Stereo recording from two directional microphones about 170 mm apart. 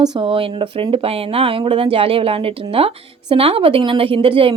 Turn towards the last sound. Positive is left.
turn(degrees=-30)  # may be behind; listen again after turning